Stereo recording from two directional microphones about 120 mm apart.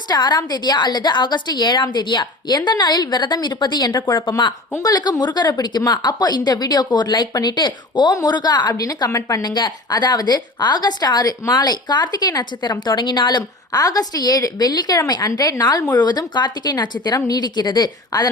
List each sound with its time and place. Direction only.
0.1 s a woman's voice: 35° left (ahead or behind)